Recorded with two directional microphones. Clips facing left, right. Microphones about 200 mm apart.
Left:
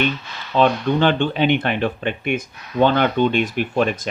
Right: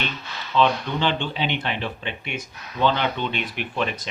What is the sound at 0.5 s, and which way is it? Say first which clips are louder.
Speech: left 4 dB; 50° left (ahead or behind).